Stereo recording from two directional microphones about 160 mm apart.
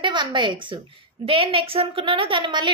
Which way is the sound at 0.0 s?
30° right (ahead or behind).